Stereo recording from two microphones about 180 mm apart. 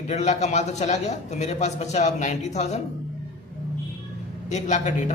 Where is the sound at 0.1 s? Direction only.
40° left (ahead or behind).